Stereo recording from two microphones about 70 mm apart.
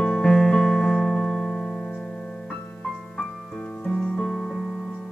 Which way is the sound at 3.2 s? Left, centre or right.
Centre.